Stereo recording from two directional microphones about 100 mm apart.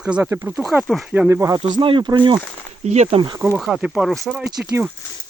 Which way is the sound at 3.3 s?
25° right (ahead or behind).